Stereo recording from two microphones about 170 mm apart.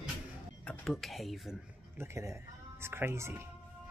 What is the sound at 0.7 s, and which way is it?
Speech, centre (ahead or behind).